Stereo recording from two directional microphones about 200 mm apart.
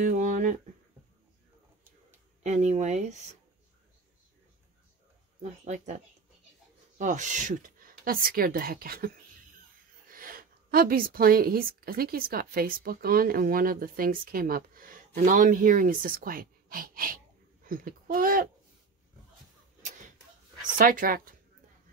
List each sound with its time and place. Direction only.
0.0 s a sound: 40° right (ahead or behind)
2.4 s speech: 35° right (ahead or behind)
5.4 s a woman's voice: 35° right (ahead or behind)
10.1 s a woman's voice: 45° right (ahead or behind)
20.7 s a woman's voice: 45° right (ahead or behind)